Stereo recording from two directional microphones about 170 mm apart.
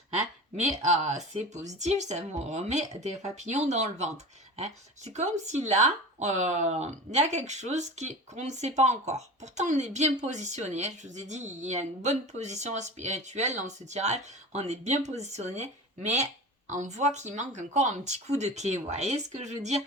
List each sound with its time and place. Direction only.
0.2 s speech: 40° right (ahead or behind)